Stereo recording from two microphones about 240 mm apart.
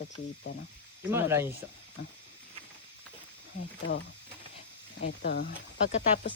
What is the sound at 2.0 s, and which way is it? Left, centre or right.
Speech, left.